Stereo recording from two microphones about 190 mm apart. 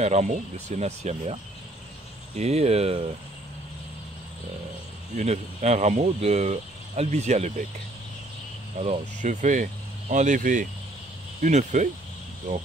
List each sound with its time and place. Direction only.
0.0 s speech: 35° right (ahead or behind)
5.1 s speech: 35° right (ahead or behind)
8.7 s speech: 35° right (ahead or behind)